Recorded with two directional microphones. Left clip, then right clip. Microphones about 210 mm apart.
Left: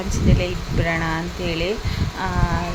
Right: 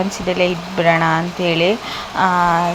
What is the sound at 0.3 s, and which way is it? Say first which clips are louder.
Speech: right 8 dB; 15° right (ahead or behind).